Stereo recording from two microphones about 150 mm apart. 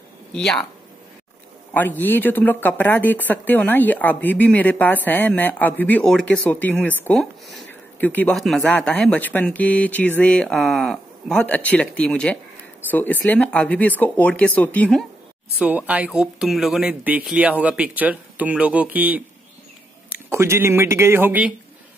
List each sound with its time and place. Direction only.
0.3 s speech: 5° left (ahead or behind)
1.7 s speech: 10° left (ahead or behind)
8.4 s speech: centre (ahead or behind)
15.6 s speech: 10° right (ahead or behind)